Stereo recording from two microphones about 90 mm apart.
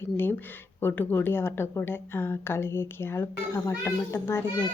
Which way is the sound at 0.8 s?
25° left (ahead or behind).